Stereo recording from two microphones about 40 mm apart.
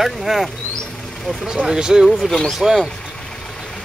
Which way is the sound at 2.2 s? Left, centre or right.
Centre.